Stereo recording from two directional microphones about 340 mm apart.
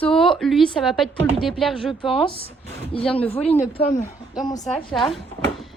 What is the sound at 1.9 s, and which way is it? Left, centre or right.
A woman's voice, centre.